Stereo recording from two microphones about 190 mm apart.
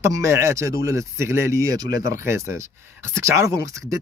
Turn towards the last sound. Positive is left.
turn(degrees=-15)  # may be behind; listen again after turning